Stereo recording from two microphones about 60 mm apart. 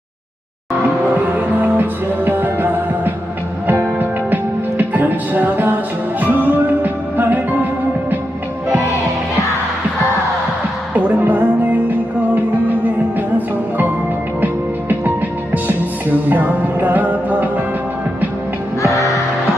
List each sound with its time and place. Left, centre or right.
1.4 s music: right
4.8 s music: right
10.9 s music: right
14.4 s music: right
16.3 s music: right
18.8 s music: left